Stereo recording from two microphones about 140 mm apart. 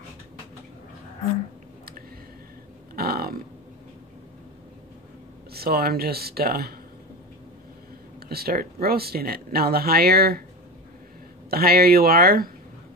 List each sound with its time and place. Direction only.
3.0 s a sound: 90° right
5.5 s speech: 90° right
8.3 s speech: 90° right
11.5 s speech: 90° right